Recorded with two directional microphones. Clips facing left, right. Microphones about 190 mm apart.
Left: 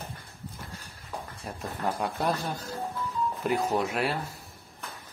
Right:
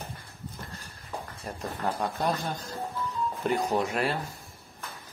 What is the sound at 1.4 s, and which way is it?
Speech, 10° left (ahead or behind).